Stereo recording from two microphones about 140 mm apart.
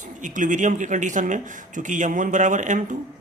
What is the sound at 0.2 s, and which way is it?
Speech, 65° right (ahead or behind).